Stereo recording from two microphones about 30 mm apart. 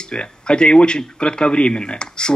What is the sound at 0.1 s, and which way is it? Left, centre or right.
Speech, left.